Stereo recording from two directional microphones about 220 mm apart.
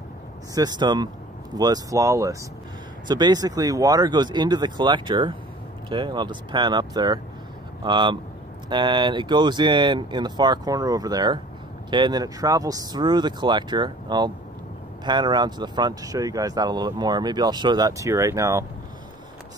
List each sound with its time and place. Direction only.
0.6 s speech: 20° right (ahead or behind)